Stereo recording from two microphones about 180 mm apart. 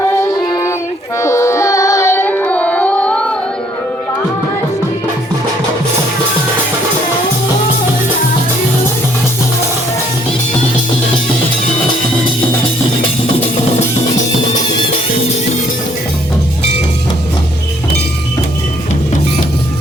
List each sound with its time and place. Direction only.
0.0 s music: 20° left (ahead or behind)